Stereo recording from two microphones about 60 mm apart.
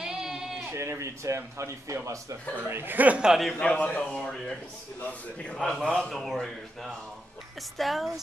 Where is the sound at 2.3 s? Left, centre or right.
Right.